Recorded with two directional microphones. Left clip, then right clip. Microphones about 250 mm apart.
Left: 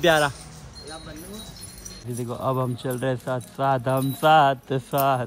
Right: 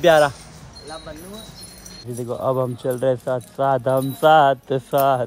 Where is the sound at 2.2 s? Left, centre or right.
Right.